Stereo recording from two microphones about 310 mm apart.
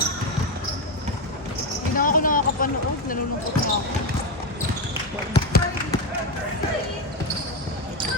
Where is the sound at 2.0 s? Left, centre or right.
Left.